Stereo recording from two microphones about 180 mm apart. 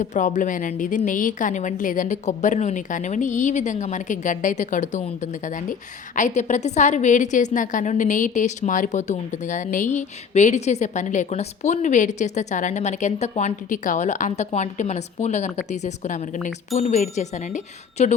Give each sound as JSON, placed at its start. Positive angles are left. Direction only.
{"t": 0.0, "sound": "a woman's voice", "side_deg": 45}